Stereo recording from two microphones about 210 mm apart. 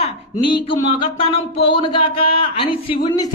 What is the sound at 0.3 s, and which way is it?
A man's voice, 25° left (ahead or behind).